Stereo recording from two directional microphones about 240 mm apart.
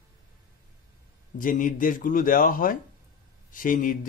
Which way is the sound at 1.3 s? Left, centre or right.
Left.